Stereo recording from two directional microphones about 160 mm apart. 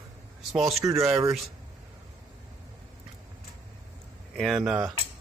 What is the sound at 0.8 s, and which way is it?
Speech, 20° right (ahead or behind).